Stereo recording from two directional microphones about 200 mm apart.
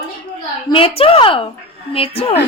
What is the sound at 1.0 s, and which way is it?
A woman's voice, 30° left (ahead or behind).